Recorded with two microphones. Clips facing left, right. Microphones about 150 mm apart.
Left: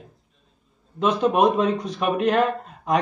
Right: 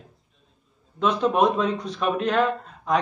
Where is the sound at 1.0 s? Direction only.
5° left (ahead or behind).